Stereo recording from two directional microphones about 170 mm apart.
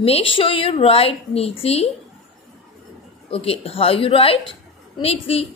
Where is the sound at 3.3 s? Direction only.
35° left (ahead or behind).